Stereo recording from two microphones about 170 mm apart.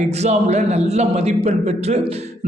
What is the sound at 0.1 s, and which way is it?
A man's voice, 40° right (ahead or behind).